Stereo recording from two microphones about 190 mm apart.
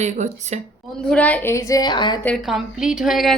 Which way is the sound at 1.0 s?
5° left (ahead or behind).